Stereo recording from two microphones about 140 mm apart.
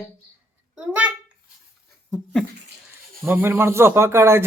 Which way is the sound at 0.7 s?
10° right (ahead or behind).